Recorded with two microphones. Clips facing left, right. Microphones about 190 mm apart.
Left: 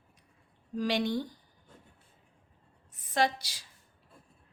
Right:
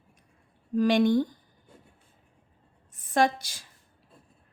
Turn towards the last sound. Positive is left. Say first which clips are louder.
# right 5 dB
turn(degrees=-50)  # may be behind; listen again after turning